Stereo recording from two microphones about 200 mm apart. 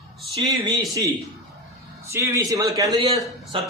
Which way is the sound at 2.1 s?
15° right (ahead or behind).